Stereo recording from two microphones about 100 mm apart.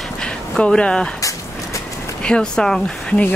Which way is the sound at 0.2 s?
5° left (ahead or behind).